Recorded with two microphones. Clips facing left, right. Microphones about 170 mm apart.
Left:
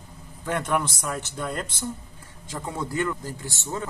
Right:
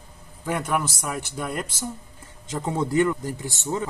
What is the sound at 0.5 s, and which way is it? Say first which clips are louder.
A man's voice: even; 10° right (ahead or behind).